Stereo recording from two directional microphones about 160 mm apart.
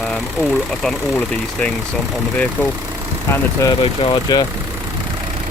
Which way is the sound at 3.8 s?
35° left (ahead or behind).